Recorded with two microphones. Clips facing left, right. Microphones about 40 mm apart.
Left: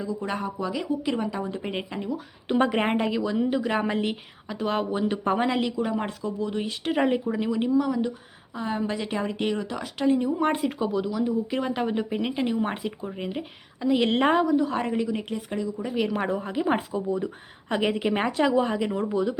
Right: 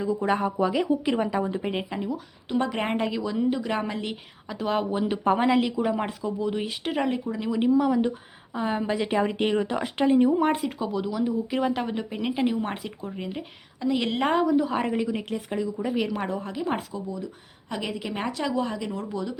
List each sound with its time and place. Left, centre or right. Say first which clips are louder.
0.0 s speech: right 5 dB; right
1.6 s a woman's voice: right 2 dB; centre
2.6 s a woman's voice: left 2 dB; centre
7.0 s speech: left 4 dB; centre
7.5 s speech: right 4 dB; centre
10.4 s a woman's voice: even; centre
16.1 s speech: left 2 dB; centre
16.6 s speech: left 5 dB; centre
17.7 s speech: left 7 dB; left; by 19.4 s centre